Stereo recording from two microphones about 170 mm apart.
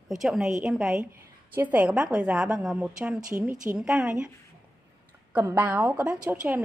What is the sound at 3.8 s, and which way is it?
Speech, 5° right (ahead or behind).